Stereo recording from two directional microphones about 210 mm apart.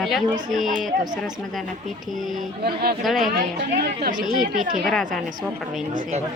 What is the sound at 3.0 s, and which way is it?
Speech, centre (ahead or behind).